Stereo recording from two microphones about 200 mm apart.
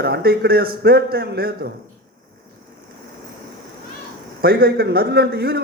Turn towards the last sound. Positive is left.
turn(degrees=-50)  # may be behind; listen again after turning